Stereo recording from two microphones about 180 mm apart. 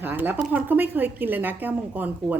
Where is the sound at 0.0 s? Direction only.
10° right (ahead or behind).